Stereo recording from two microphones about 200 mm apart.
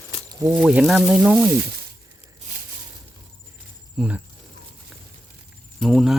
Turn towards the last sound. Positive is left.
turn(degrees=0)  # may be behind; listen again after turning